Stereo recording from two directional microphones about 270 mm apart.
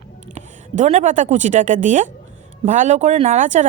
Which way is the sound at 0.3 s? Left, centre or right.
Right.